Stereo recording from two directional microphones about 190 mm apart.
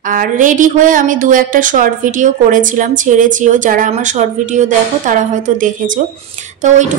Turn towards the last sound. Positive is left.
turn(degrees=-40)  # may be behind; listen again after turning